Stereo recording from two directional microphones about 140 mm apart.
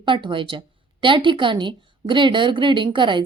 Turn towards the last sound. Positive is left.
turn(degrees=-35)  # may be behind; listen again after turning